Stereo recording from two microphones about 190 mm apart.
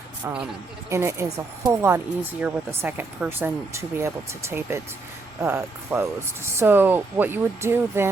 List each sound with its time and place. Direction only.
0.9 s speech: 15° right (ahead or behind)